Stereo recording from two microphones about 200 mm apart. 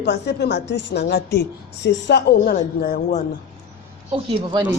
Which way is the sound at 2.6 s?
40° left (ahead or behind).